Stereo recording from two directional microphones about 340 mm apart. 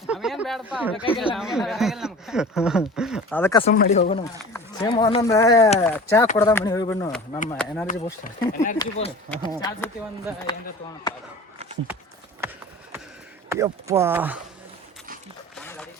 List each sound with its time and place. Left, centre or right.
0.0 s a sound: centre
1.0 s speech: centre
1.4 s speech: centre
8.2 s speech: left
13.5 s speech: centre
15.5 s a sound: centre